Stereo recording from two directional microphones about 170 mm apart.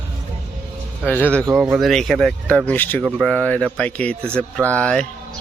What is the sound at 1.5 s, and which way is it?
Speech, centre (ahead or behind).